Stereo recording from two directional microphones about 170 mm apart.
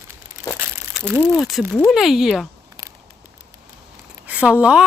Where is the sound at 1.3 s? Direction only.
Centre (ahead or behind).